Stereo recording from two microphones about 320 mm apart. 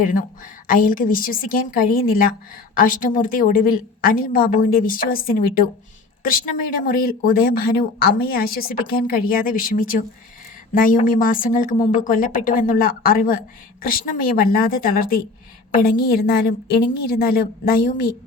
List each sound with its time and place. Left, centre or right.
0.7 s speech: left